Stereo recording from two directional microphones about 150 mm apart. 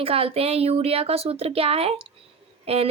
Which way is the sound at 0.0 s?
40° right (ahead or behind).